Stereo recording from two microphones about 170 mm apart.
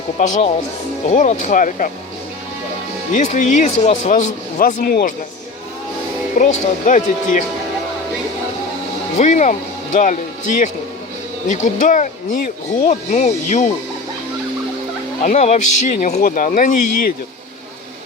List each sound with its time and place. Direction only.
0.2 s a man's voice: 45° left (ahead or behind)
3.1 s a man's voice: 45° left (ahead or behind)
6.3 s a man's voice: 50° left (ahead or behind)
9.1 s a man's voice: 45° left (ahead or behind)
15.2 s a man's voice: 45° left (ahead or behind)